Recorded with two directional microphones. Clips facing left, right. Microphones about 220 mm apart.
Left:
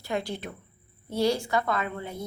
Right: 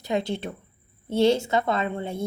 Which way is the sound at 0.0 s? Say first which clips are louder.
Right 5 dB; 20° right (ahead or behind).